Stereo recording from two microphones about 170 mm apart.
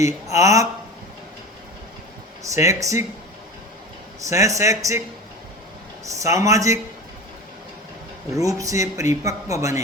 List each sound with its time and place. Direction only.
0.0 s speech: 20° right (ahead or behind)
2.4 s speech: 20° right (ahead or behind)
4.2 s speech: 20° right (ahead or behind)
6.1 s speech: 20° right (ahead or behind)
8.4 s speech: 20° right (ahead or behind)